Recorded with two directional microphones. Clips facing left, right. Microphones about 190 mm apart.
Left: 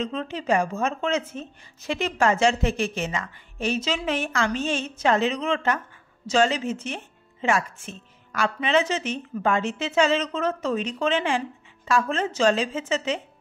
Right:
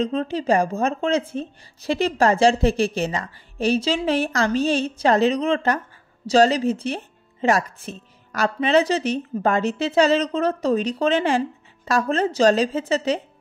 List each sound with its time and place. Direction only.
0.0 s speech: 35° right (ahead or behind)